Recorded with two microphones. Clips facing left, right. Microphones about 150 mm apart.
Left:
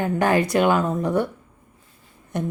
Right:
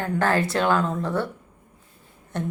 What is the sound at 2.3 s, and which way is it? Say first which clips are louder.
Speech: left 2 dB; 10° left (ahead or behind).